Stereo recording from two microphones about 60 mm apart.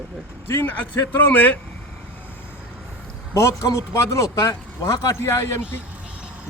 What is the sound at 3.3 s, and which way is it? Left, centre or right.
Speech, left.